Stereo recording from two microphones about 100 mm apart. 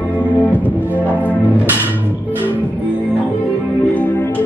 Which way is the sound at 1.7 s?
20° right (ahead or behind).